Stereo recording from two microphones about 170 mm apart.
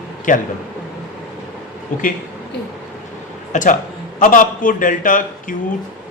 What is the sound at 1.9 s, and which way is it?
Speech, 50° left (ahead or behind).